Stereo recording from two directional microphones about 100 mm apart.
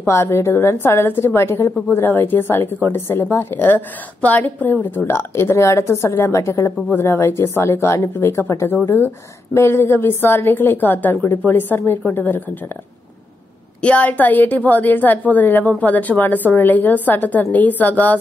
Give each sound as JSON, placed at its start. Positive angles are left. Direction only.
{"t": 0.0, "sound": "a woman's voice", "side_deg": 25}
{"t": 13.7, "sound": "a woman's voice", "side_deg": 10}